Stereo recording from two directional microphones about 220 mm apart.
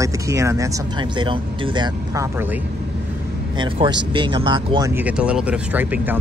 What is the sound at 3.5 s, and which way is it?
A man's voice, 20° right (ahead or behind).